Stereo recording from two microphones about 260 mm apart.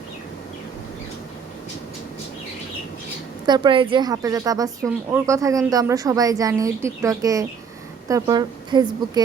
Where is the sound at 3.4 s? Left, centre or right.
Centre.